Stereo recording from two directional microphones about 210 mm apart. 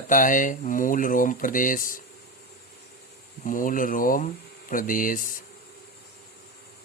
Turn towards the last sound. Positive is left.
turn(degrees=40)  # may be behind; listen again after turning